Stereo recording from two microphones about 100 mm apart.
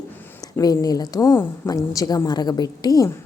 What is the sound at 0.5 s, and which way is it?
A woman's voice, 35° left (ahead or behind).